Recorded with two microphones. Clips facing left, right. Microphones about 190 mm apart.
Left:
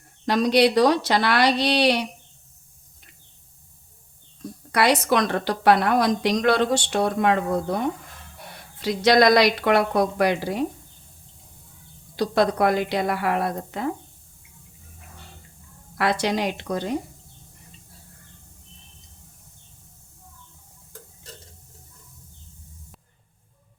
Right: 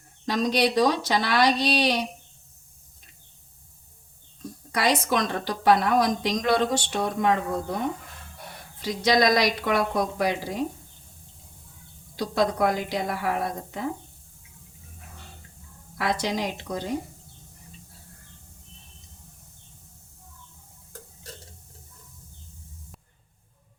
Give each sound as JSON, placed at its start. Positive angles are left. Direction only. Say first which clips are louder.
{"t": 0.3, "sound": "a woman's voice", "louder": "left 5 dB", "side_deg": 65}
{"t": 4.7, "sound": "a woman's voice", "louder": "left 4 dB", "side_deg": 70}
{"t": 8.8, "sound": "a woman's voice", "louder": "left 4 dB", "side_deg": 70}
{"t": 12.1, "sound": "a woman's voice", "louder": "left 4 dB", "side_deg": 70}
{"t": 16.0, "sound": "a woman's voice", "louder": "left 4 dB", "side_deg": 70}